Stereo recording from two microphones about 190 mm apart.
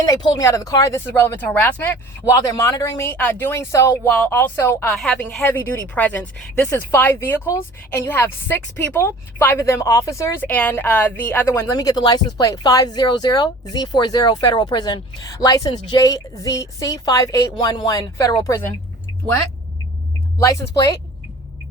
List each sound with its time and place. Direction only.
0.1 s a woman's voice: 20° left (ahead or behind)
20.4 s a woman's voice: 15° left (ahead or behind)